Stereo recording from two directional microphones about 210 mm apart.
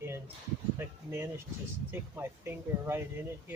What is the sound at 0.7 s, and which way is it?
Speech, 10° right (ahead or behind).